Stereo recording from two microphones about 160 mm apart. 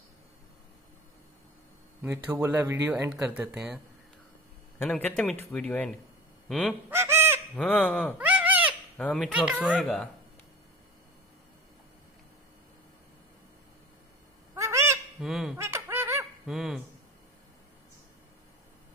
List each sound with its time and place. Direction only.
2.0 s speech: 10° right (ahead or behind)
4.7 s a man's voice: 10° left (ahead or behind)
6.9 s fowl: 15° right (ahead or behind)
7.5 s a man's voice: 5° left (ahead or behind)
8.2 s babbling: 10° right (ahead or behind)
8.9 s speech: 10° left (ahead or behind)
9.3 s speech: 5° right (ahead or behind)
14.5 s owl: 15° right (ahead or behind)
15.1 s speech: centre (ahead or behind)
15.5 s laughter: 15° right (ahead or behind)
16.4 s speech: centre (ahead or behind)